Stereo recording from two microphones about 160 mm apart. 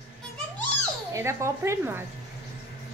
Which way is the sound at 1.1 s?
20° right (ahead or behind).